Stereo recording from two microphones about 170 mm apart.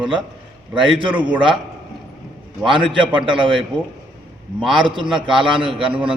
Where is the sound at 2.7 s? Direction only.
30° right (ahead or behind).